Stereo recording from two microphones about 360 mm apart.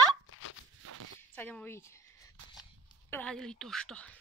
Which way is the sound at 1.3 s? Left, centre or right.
Centre.